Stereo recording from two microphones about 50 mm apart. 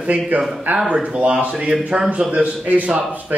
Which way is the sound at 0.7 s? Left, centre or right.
Right.